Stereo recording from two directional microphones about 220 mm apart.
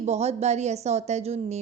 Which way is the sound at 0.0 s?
30° right (ahead or behind).